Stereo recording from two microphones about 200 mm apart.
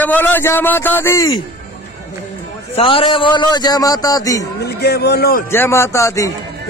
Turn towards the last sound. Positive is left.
turn(degrees=15)  # may be behind; listen again after turning